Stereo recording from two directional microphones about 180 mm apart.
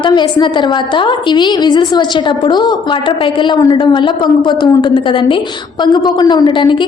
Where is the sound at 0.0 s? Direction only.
25° left (ahead or behind).